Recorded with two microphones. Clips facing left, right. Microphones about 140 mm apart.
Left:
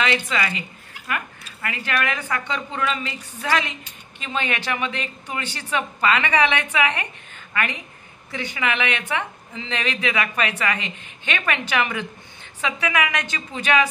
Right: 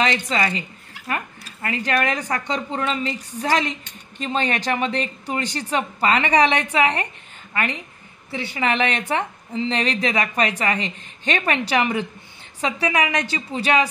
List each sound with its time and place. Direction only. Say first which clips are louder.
0.0 s a woman's voice: right 2 dB; 35° right (ahead or behind)
8.3 s a woman's voice: right 3 dB; 30° right (ahead or behind)